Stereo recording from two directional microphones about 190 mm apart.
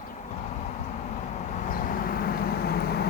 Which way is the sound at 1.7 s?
45° left (ahead or behind).